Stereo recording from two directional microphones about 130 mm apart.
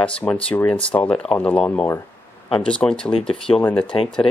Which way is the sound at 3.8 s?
45° left (ahead or behind).